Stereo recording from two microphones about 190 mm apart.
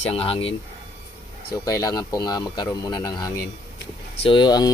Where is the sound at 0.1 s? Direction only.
30° left (ahead or behind).